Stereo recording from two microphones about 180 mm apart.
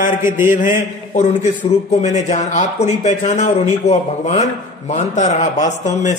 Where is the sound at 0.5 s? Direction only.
45° left (ahead or behind).